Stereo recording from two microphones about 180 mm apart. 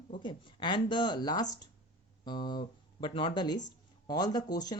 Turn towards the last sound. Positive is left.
turn(degrees=20)  # may be behind; listen again after turning